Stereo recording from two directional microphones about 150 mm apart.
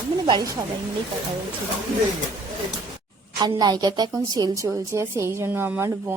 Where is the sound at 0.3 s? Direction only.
30° right (ahead or behind).